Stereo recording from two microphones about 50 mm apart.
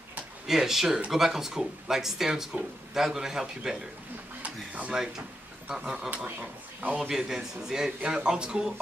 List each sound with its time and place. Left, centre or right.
0.5 s speech: centre
4.4 s a sound: right
4.9 s speech: centre
6.4 s speech: right
7.0 s speech: centre